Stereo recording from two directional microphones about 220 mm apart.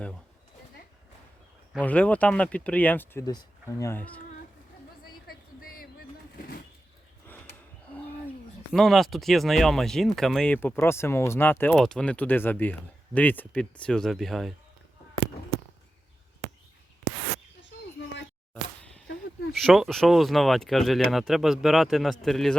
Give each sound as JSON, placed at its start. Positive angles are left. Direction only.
{"t": 1.8, "sound": "speech", "side_deg": 5}
{"t": 5.3, "sound": "a sound", "side_deg": 40}
{"t": 8.7, "sound": "speech", "side_deg": 0}
{"t": 19.5, "sound": "speech", "side_deg": 0}